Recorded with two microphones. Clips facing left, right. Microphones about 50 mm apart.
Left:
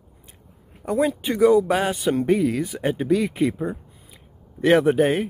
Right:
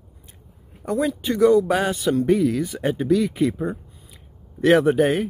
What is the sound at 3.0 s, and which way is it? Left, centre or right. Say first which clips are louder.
Speech: right 1 dB; centre.